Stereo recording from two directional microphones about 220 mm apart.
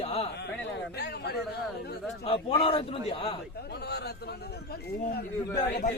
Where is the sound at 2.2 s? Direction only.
25° left (ahead or behind).